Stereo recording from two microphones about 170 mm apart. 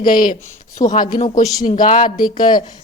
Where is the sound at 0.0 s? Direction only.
55° left (ahead or behind).